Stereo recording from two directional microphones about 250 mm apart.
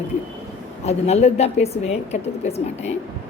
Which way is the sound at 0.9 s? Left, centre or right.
Left.